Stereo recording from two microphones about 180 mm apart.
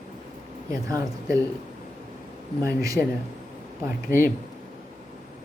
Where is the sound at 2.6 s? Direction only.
20° right (ahead or behind).